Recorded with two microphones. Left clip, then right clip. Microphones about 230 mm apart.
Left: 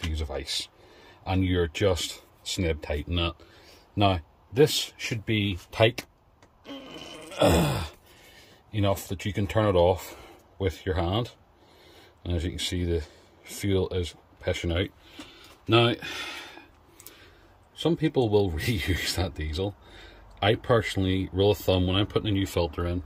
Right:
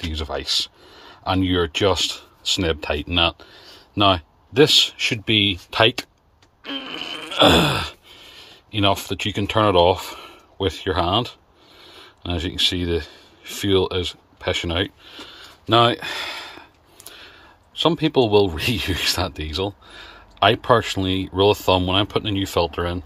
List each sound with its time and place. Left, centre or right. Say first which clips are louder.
0.1 s speech: right 9 dB; centre
6.6 s fart: right 12 dB; centre
7.2 s groan: right 8 dB; right
7.8 s a sound: right 10 dB; centre
10.6 s speech: right 7 dB; centre
13.1 s a sound: right 9 dB; centre
17.7 s speech: right 7 dB; centre